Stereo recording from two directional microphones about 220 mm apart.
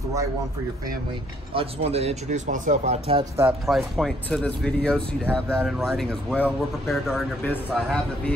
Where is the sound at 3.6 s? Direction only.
Centre (ahead or behind).